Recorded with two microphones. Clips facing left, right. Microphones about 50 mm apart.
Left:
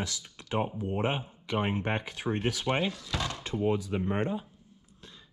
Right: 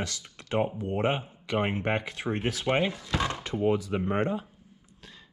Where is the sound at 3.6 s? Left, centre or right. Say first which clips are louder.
Right 3 dB; right.